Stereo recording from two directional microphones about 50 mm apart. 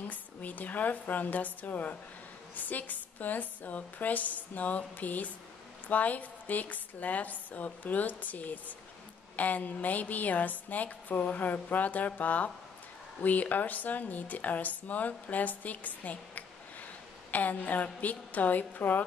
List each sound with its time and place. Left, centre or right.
0.1 s speech: left